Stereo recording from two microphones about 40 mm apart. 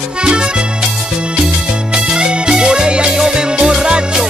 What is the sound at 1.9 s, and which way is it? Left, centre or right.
Music, right.